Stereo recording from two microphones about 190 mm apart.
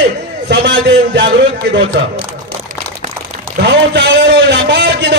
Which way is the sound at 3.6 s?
65° right (ahead or behind).